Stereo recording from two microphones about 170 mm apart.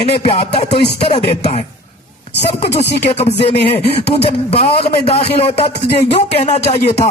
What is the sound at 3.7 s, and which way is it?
A man's voice, 35° left (ahead or behind).